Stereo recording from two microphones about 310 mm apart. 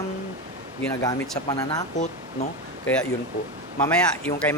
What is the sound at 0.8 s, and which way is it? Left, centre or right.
Mantra, centre.